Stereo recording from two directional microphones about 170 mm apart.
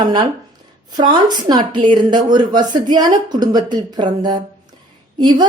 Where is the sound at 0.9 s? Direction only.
25° right (ahead or behind).